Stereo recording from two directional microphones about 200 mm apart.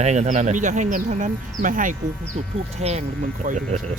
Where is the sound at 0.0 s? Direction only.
35° right (ahead or behind).